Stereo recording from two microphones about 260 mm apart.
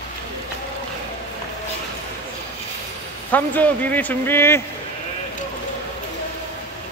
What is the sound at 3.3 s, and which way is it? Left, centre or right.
Speech, centre.